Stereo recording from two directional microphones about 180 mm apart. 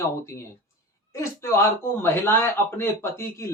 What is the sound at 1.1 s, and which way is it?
Speech, 15° left (ahead or behind).